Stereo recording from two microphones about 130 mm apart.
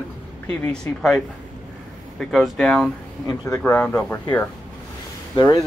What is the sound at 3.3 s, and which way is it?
Speech, 20° left (ahead or behind).